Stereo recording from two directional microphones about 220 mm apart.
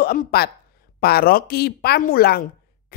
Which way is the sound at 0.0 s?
45° left (ahead or behind).